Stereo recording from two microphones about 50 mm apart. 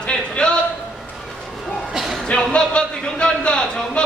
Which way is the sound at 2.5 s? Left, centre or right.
Centre.